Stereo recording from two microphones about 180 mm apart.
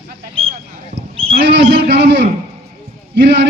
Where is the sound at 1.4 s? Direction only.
75° right (ahead or behind).